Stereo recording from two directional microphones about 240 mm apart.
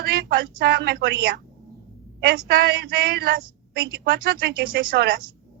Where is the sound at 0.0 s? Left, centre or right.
Right.